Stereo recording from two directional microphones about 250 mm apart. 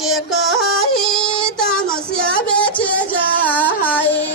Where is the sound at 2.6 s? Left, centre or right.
Centre.